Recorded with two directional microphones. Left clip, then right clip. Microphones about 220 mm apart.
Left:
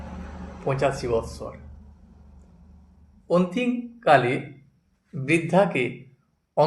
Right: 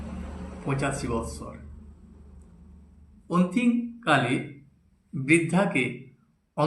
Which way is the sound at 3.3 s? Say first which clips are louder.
Left 3 dB; 35° left (ahead or behind).